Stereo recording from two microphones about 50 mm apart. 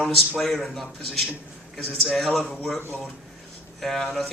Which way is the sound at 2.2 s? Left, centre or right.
Centre.